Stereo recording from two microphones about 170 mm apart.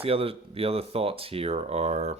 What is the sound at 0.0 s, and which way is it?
Speech, 35° right (ahead or behind).